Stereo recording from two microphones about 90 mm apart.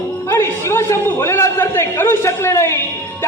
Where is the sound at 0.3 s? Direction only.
30° left (ahead or behind).